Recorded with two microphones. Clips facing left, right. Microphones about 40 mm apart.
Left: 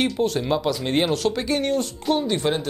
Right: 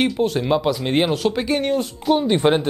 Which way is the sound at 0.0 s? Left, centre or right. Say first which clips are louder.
Right 3 dB; centre.